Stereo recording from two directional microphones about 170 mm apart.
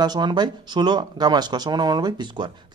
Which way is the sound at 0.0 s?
25° right (ahead or behind).